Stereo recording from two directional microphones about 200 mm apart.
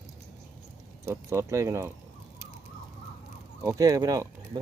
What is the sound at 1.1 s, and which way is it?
Speech, 15° right (ahead or behind).